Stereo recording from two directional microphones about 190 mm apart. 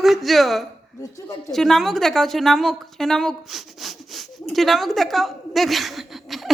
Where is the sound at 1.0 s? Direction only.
20° left (ahead or behind).